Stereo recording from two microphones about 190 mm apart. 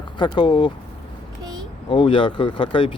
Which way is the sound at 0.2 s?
25° left (ahead or behind).